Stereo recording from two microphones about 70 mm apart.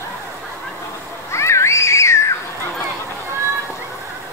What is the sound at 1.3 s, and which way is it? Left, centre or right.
Children playing, left.